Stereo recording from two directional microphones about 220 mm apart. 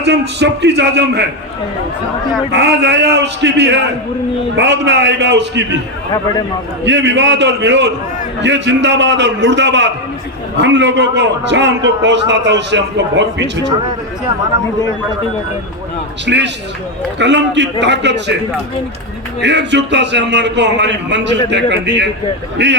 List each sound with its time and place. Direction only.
0.0 s a man's voice: 50° right (ahead or behind)
2.5 s a man's voice: 50° right (ahead or behind)
6.8 s a man's voice: 55° right (ahead or behind)
16.2 s a man's voice: 50° right (ahead or behind)
19.4 s a man's voice: 50° right (ahead or behind)